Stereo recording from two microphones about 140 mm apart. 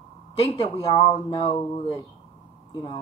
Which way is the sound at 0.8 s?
50° left (ahead or behind).